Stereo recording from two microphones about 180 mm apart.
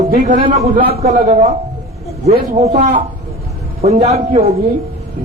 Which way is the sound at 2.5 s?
40° right (ahead or behind).